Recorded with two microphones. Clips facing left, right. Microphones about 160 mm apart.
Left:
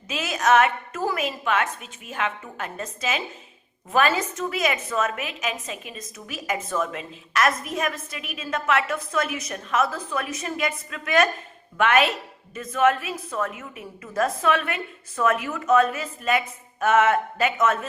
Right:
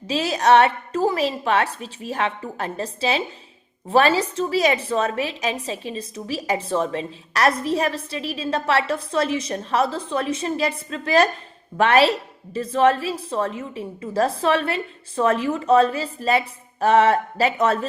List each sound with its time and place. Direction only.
0.1 s a woman's voice: 35° right (ahead or behind)